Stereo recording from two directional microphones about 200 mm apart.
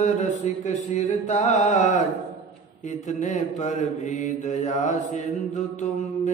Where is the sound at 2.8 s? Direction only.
35° left (ahead or behind).